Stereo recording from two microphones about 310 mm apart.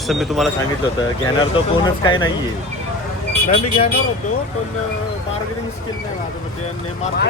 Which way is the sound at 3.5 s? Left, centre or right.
Centre.